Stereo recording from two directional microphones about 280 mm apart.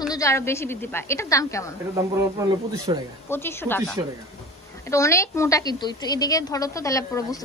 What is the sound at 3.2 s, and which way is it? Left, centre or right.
Speech, centre.